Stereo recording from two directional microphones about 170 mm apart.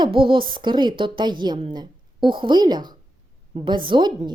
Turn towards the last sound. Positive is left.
turn(degrees=-25)  # may be behind; listen again after turning